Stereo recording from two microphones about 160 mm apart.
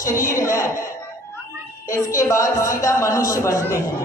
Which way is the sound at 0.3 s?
20° left (ahead or behind).